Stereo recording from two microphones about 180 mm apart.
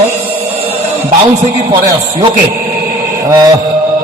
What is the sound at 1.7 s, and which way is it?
Speech, 20° right (ahead or behind).